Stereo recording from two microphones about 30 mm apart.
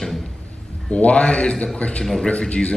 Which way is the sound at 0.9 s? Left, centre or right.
Left.